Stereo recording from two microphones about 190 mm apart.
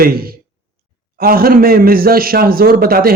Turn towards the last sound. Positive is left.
turn(degrees=-50)  # may be behind; listen again after turning